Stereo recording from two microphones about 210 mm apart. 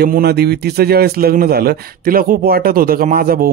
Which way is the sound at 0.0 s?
50° right (ahead or behind).